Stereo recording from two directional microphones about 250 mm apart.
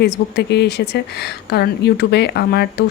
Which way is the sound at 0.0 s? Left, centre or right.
Left.